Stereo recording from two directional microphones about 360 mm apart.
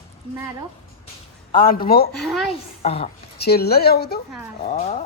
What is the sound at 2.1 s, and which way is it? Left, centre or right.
Speech, centre.